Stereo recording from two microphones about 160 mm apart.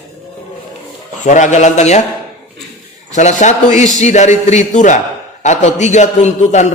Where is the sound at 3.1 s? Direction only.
50° left (ahead or behind).